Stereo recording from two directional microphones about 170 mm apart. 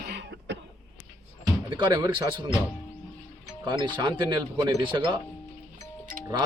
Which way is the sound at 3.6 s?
30° right (ahead or behind).